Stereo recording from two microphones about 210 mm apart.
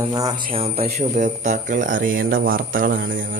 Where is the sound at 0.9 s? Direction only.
35° right (ahead or behind).